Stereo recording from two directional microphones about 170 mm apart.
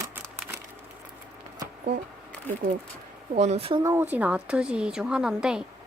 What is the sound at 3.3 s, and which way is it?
Speech, 40° right (ahead or behind).